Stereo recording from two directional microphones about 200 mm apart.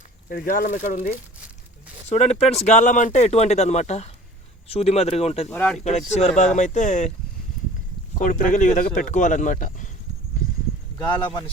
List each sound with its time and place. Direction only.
0.3 s speech: 45° left (ahead or behind)
5.5 s speech: 5° left (ahead or behind)
6.1 s speech: 35° left (ahead or behind)
8.2 s speech: 40° left (ahead or behind)